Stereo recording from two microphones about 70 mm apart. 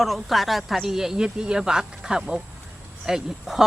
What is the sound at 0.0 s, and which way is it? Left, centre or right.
Speech, centre.